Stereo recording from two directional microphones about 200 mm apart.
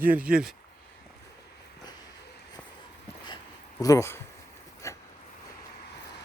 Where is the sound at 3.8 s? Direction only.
15° left (ahead or behind).